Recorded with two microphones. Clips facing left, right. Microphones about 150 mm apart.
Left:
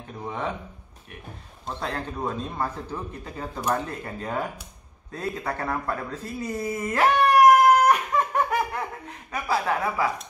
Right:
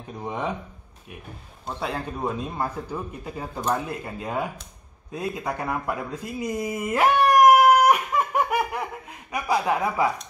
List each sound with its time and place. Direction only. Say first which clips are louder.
0.2 s speech: right 2 dB; 15° right (ahead or behind)
1.7 s speech: right 1 dB; 10° right (ahead or behind)
5.1 s a sound: right 1 dB; 10° right (ahead or behind)
9.3 s speech: right 2 dB; 15° right (ahead or behind)